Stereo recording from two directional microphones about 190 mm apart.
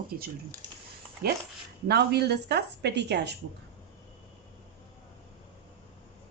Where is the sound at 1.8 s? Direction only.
60° right (ahead or behind).